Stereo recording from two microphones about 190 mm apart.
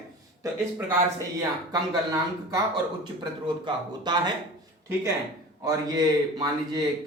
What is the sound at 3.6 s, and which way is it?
Speech, 25° right (ahead or behind).